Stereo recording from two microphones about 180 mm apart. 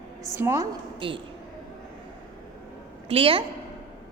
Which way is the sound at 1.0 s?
25° right (ahead or behind).